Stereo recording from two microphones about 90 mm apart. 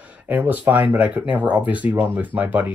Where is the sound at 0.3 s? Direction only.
20° right (ahead or behind).